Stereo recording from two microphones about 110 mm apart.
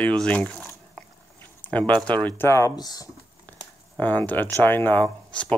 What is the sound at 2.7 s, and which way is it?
Speech, 35° left (ahead or behind).